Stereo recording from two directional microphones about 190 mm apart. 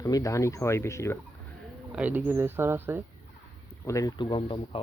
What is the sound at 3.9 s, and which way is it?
Speech, 20° left (ahead or behind).